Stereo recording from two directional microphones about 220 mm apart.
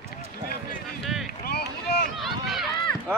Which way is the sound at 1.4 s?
45° left (ahead or behind).